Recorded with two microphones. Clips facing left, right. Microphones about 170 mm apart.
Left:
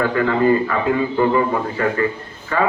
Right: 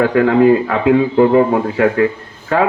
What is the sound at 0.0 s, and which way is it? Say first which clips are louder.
A man's voice: right 6 dB; 65° right (ahead or behind).